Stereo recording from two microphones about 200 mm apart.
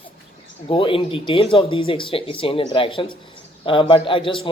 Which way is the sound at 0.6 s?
25° left (ahead or behind).